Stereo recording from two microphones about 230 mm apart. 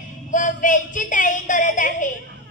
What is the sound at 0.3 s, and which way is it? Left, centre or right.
Speech, left.